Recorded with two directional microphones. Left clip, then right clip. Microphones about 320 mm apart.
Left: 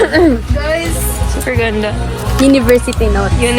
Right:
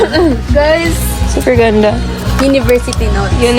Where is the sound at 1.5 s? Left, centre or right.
Centre.